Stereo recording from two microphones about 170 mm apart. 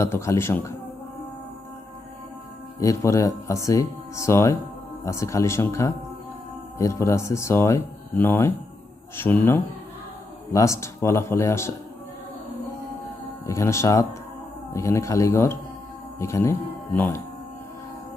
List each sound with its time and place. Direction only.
0.0 s speech: 15° left (ahead or behind)
2.8 s speech: 20° left (ahead or behind)
13.5 s speech: 15° left (ahead or behind)